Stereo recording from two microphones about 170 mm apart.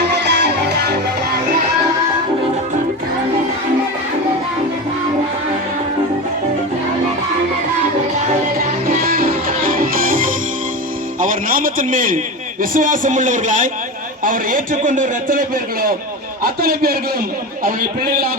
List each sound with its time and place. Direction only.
0.1 s music: 90° right; by 0.9 s 75° right (ahead or behind)
8.9 s music: 60° right (ahead or behind)
11.2 s a sound: 55° right (ahead or behind)
12.7 s a man's voice: 50° right (ahead or behind)